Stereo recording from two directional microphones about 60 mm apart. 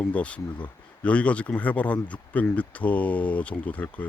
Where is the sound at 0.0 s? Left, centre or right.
Left.